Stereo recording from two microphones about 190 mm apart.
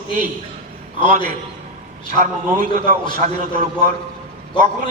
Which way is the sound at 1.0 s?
45° right (ahead or behind).